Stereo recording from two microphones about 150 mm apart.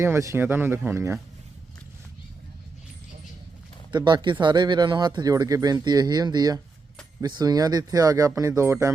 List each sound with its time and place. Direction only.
0.0 s speech: 20° right (ahead or behind)
3.9 s speech: 30° right (ahead or behind)